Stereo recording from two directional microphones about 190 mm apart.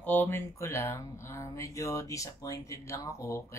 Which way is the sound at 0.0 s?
10° left (ahead or behind).